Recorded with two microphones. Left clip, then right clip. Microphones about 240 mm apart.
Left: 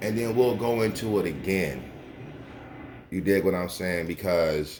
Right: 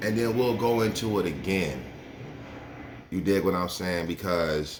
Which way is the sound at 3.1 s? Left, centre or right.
Centre.